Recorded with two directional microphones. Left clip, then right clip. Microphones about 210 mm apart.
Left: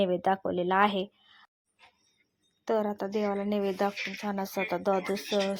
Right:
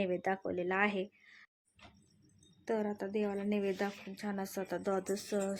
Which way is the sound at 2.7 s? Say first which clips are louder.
Left 7 dB; 10° left (ahead or behind).